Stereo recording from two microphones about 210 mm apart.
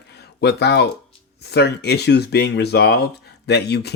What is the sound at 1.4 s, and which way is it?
Speech, 50° left (ahead or behind).